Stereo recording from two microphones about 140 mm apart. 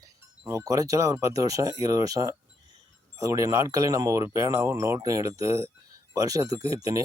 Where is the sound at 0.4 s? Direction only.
20° right (ahead or behind).